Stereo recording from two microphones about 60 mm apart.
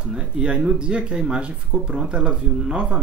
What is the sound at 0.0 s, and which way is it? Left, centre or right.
Speech, centre.